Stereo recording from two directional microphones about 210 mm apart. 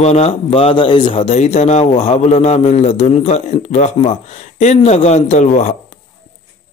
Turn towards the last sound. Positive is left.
turn(degrees=35)  # may be behind; listen again after turning